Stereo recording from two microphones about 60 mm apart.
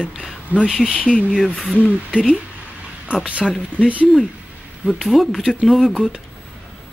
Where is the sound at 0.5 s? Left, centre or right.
Right.